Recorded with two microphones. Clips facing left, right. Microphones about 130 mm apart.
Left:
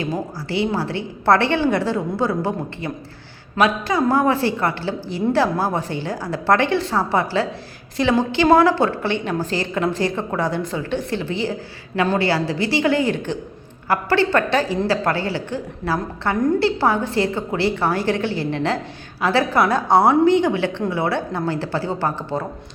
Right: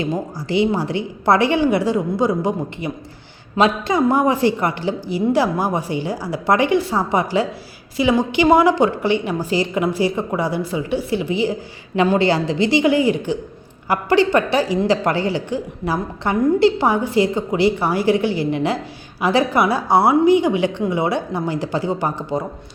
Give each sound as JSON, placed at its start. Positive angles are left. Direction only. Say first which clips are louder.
{"t": 0.0, "sound": "speech", "louder": "right 2 dB", "side_deg": -20}